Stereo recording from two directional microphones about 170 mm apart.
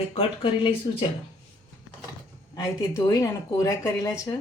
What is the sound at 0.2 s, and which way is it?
Speech, 30° left (ahead or behind).